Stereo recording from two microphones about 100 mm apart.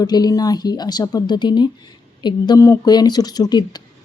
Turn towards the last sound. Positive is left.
turn(degrees=45)  # may be behind; listen again after turning